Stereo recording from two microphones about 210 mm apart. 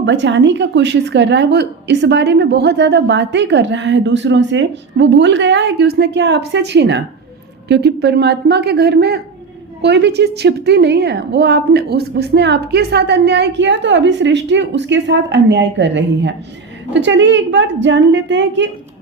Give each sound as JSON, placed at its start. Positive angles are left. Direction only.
{"t": 0.0, "sound": "a woman's voice", "side_deg": -60}